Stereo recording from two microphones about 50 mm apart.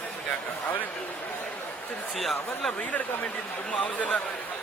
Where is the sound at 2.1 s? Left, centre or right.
Centre.